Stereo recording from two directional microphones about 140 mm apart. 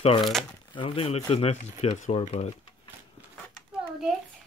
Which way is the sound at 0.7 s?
40° left (ahead or behind).